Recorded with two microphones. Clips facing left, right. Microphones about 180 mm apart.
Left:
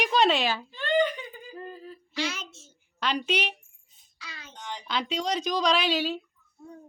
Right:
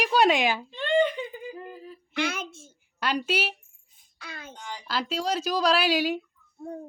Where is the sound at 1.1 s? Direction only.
20° right (ahead or behind).